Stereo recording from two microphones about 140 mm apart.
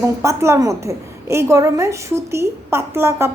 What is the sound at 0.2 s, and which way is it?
A woman's voice, 20° right (ahead or behind).